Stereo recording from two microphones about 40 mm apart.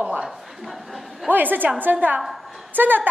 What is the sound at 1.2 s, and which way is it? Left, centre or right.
A woman's voice, right.